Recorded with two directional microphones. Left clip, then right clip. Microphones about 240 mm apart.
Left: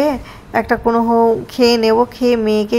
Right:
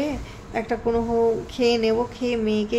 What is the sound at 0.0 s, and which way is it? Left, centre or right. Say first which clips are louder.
A woman's voice: left 11 dB; centre.